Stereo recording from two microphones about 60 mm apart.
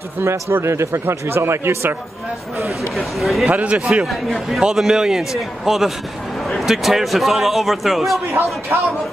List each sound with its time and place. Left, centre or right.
0.2 s speech: right
3.0 s a man's voice: centre
3.4 s speech: right
3.7 s a man's voice: centre
8.7 s speech: right